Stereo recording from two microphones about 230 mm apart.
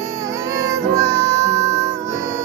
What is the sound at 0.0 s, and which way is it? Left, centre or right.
Music, centre.